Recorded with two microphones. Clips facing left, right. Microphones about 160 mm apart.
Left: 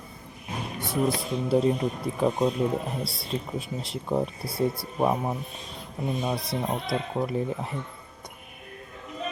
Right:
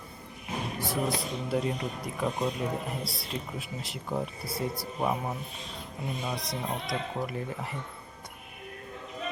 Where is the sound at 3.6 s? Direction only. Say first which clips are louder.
Left 5 dB; 25° left (ahead or behind).